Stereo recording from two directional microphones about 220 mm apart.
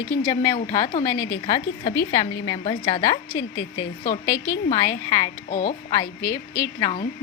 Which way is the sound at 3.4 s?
55° left (ahead or behind).